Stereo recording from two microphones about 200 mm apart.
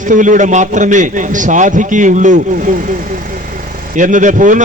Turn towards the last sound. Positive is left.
turn(degrees=-40)  # may be behind; listen again after turning